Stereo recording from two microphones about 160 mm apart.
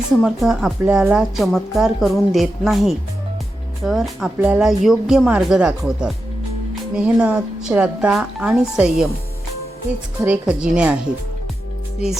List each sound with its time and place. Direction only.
0.2 s speech: centre (ahead or behind)
10.2 s speech: 10° right (ahead or behind)